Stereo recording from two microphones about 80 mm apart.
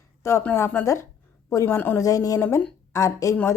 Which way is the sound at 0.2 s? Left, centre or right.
Left.